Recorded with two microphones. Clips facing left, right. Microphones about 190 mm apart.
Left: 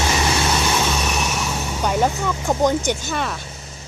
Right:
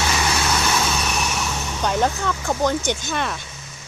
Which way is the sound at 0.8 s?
Centre (ahead or behind).